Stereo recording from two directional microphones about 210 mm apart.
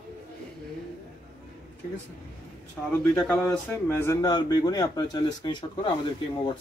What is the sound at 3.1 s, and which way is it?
A man's voice, 5° left (ahead or behind).